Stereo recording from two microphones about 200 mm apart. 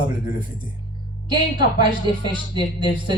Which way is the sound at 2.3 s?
25° right (ahead or behind).